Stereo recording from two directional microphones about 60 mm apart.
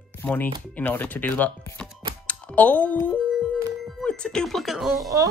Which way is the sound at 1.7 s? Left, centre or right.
Left.